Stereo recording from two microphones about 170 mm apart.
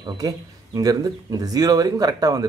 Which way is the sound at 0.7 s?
20° right (ahead or behind).